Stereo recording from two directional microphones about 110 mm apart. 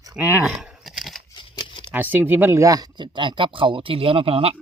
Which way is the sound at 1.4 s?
45° left (ahead or behind).